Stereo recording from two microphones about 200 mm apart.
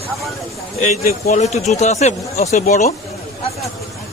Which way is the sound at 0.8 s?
50° left (ahead or behind).